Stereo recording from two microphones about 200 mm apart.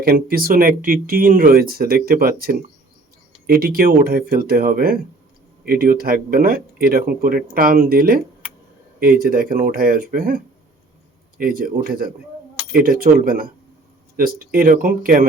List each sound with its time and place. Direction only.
0.0 s speech: 50° right (ahead or behind)